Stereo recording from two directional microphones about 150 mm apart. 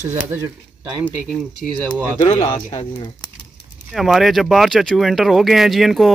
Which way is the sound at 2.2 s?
35° left (ahead or behind).